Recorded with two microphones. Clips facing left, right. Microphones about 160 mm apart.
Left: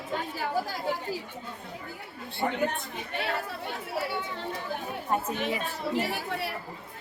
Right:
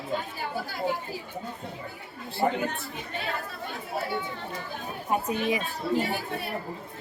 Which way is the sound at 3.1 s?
70° left (ahead or behind).